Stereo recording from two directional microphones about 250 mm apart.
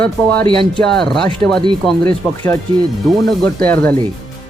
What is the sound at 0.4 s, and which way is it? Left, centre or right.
Speech, centre.